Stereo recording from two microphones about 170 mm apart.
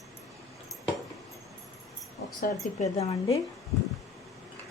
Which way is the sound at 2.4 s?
45° left (ahead or behind).